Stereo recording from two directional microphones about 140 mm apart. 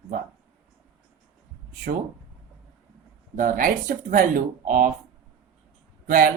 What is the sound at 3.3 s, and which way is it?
Speech, 75° right (ahead or behind).